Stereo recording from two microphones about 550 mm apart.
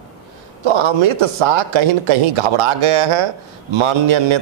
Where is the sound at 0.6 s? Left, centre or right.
Right.